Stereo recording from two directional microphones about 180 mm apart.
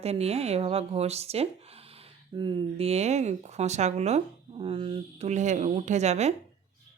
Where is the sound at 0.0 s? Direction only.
35° right (ahead or behind).